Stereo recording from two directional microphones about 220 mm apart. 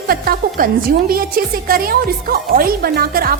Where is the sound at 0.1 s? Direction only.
40° right (ahead or behind).